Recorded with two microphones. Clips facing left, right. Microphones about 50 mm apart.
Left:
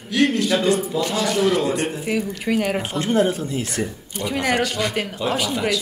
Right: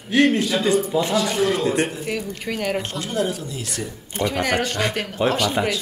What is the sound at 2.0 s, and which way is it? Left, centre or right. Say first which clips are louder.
Speech: left 4 dB; centre.